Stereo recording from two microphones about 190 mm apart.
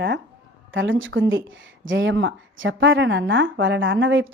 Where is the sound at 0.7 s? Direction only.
85° right.